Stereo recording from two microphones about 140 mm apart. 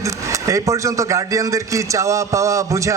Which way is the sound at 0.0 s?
20° right (ahead or behind).